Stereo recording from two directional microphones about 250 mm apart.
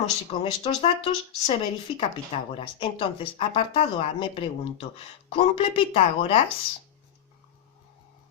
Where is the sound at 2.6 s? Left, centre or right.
Left.